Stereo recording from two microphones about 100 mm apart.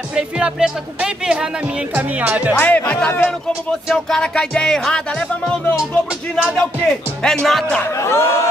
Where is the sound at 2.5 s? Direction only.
20° left (ahead or behind).